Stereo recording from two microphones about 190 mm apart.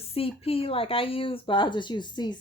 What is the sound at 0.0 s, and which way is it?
Speech, 30° left (ahead or behind).